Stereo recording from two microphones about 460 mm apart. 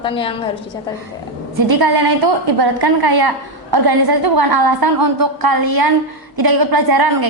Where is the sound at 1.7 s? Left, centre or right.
Right.